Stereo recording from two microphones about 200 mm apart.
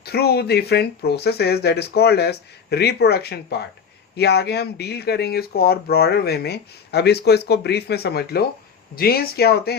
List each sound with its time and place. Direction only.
0.0 s speech: 50° left (ahead or behind)